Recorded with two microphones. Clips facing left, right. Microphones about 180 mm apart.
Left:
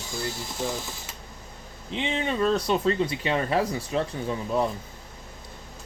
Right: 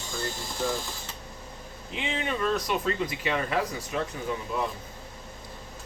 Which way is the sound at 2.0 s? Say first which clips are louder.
Left 4 dB; 25° left (ahead or behind).